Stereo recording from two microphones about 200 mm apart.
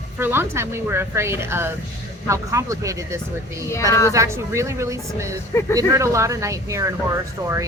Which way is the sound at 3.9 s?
15° left (ahead or behind).